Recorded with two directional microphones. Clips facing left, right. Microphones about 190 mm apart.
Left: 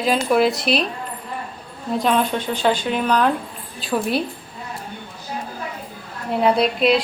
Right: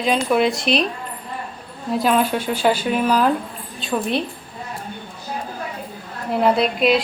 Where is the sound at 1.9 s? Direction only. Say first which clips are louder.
Right 1 dB; 5° right (ahead or behind).